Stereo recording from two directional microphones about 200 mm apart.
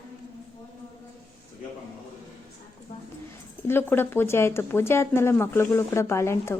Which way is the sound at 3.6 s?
10° left (ahead or behind).